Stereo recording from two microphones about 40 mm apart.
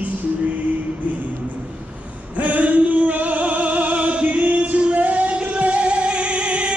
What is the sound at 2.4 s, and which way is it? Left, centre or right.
Music, right.